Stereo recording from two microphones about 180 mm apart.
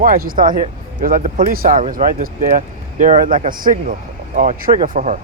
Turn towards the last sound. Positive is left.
turn(degrees=-40)  # may be behind; listen again after turning